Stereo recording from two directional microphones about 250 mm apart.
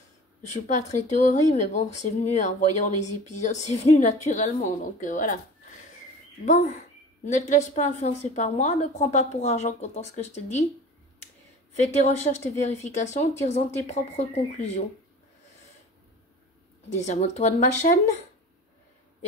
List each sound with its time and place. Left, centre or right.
0.4 s a woman's voice: left
12.2 s a woman's voice: left
16.9 s a woman's voice: left